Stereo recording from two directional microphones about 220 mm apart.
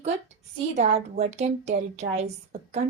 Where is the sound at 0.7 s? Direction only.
30° right (ahead or behind).